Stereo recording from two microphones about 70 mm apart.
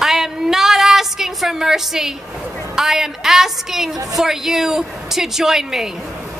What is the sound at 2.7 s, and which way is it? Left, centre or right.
A woman's voice, centre.